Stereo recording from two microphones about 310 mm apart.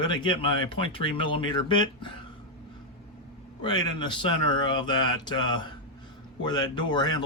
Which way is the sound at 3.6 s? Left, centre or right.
Centre.